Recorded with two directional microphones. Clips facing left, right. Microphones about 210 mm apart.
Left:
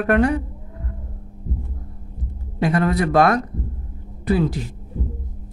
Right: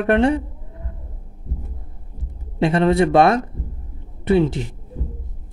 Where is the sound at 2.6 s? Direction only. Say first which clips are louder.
Right 3 dB; 25° right (ahead or behind).